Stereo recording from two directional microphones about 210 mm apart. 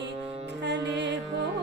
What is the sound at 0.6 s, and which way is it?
Music, 55° right (ahead or behind).